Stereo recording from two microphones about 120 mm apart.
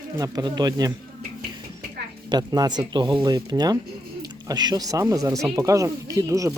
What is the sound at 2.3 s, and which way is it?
Speech, 35° right (ahead or behind).